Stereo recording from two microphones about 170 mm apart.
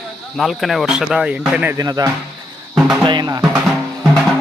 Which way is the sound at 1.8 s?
20° right (ahead or behind).